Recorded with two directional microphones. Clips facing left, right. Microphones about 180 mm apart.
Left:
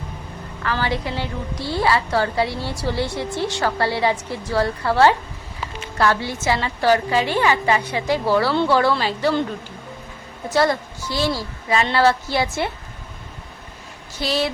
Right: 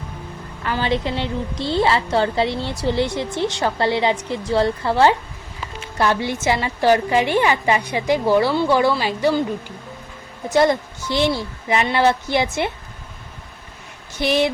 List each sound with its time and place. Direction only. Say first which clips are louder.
0.6 s a woman's voice: right 2 dB; 20° right (ahead or behind)
10.5 s a woman's voice: right 3 dB; 20° right (ahead or behind)
14.2 s a woman's voice: right 4 dB; 20° right (ahead or behind)